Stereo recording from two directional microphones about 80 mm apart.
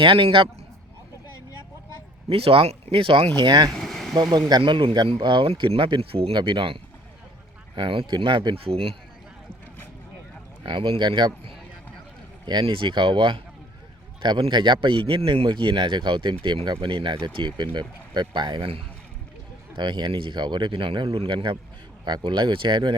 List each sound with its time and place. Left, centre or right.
0.0 s speech: right
2.9 s speech: right
3.3 s speech: right
3.8 s vehicle: centre
4.1 s speech: right
7.8 s speech: right
10.6 s speech: right
12.5 s speech: right
14.2 s speech: right
22.0 s speech: right